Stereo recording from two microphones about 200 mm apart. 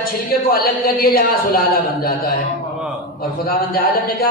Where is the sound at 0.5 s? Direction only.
45° left (ahead or behind).